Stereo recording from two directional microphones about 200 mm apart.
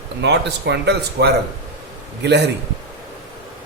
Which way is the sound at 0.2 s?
60° right (ahead or behind).